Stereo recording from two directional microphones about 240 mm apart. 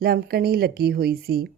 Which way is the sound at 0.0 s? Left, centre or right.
Right.